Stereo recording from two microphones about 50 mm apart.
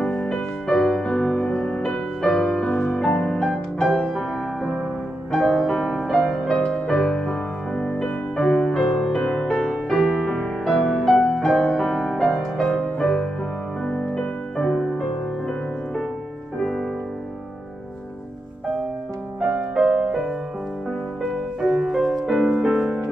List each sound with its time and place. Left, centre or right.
0.1 s music: centre
2.5 s music: centre
5.3 s music: centre
7.0 s music: centre
8.8 s music: centre
19.5 s music: centre
21.5 s music: centre